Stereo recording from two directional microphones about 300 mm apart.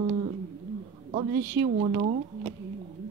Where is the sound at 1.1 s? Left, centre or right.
Right.